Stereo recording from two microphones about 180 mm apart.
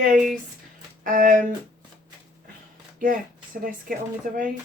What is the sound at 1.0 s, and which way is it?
Speech, 45° right (ahead or behind).